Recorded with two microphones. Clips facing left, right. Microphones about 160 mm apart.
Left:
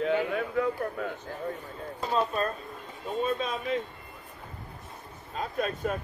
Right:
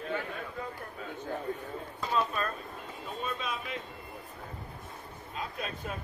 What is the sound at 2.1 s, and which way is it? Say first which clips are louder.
Speech: left 3 dB; 35° left (ahead or behind).